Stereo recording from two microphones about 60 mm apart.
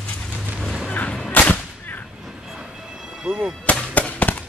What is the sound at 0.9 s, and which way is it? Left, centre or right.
Whip, left.